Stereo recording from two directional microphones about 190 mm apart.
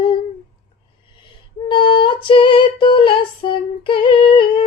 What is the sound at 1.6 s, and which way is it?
Female singing, 25° left (ahead or behind).